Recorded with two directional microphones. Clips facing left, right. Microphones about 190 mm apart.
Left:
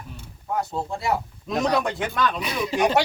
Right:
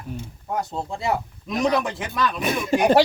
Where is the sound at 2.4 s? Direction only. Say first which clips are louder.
Right 2 dB; 50° right (ahead or behind).